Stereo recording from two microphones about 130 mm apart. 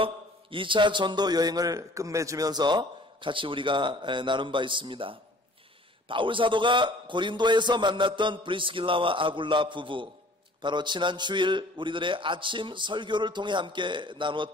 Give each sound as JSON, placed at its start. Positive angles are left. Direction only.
{"t": 0.0, "sound": "a man's voice", "side_deg": -40}